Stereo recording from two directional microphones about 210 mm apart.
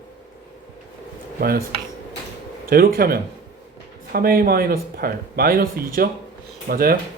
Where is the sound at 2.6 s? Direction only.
45° right (ahead or behind).